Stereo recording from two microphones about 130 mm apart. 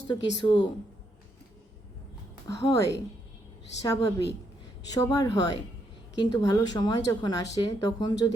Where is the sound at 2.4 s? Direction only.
25° left (ahead or behind).